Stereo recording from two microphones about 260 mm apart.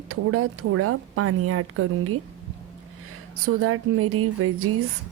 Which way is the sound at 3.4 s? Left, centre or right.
Right.